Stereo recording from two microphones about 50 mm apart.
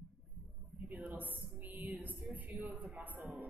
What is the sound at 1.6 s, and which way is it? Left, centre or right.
Music, right.